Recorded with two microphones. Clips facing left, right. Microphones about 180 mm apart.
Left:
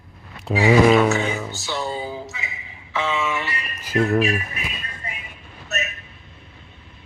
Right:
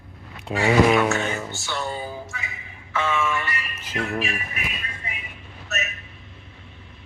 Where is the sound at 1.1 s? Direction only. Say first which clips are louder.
Left 3 dB; 15° left (ahead or behind).